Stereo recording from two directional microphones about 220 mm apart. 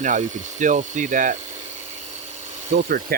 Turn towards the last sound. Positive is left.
turn(degrees=-40)  # may be behind; listen again after turning